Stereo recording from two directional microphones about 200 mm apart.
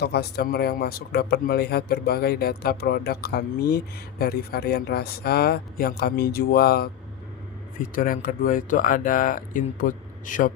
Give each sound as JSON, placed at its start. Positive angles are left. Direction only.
{"t": 0.0, "sound": "speech", "side_deg": 55}